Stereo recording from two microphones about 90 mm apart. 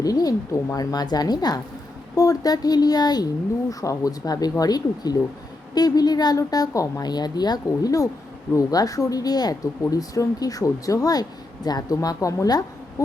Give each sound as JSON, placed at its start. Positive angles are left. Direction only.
{"t": 0.0, "sound": "speech", "side_deg": 45}